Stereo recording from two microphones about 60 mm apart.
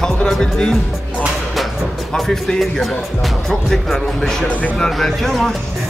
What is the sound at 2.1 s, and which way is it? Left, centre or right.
Speech, centre.